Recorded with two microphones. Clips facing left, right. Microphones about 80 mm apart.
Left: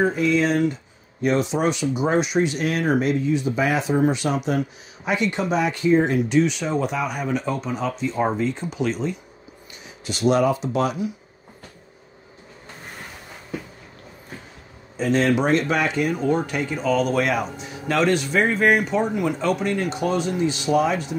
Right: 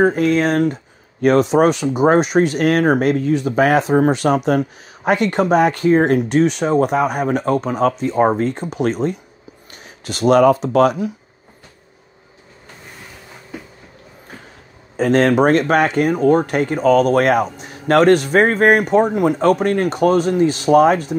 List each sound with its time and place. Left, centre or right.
0.0 s speech: right
15.0 s speech: right